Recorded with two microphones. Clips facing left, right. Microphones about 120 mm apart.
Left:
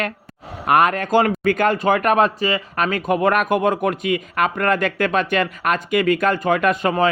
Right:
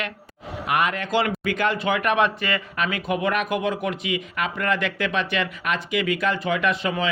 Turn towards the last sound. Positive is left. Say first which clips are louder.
# left 6 dB
turn(degrees=45)  # may be behind; listen again after turning